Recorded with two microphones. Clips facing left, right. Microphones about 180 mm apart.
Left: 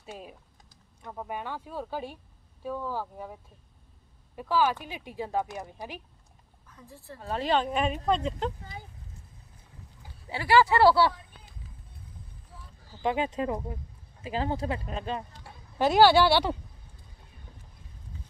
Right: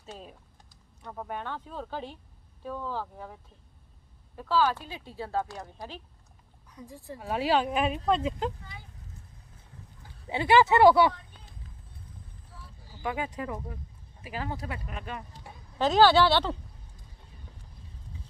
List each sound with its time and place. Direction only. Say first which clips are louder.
0.0 s typing: left 2 dB; 10° left (ahead or behind)
1.0 s speech: even; 5° left (ahead or behind)
4.4 s speech: even; 15° left (ahead or behind)
6.7 s speech: right 4 dB; 15° right (ahead or behind)
8.6 s speech: left 4 dB; 40° left (ahead or behind)
10.2 s speech: right 1 dB; 20° right (ahead or behind)
13.0 s speech: left 5 dB; 25° left (ahead or behind)
15.8 s speech: left 1 dB; 10° left (ahead or behind)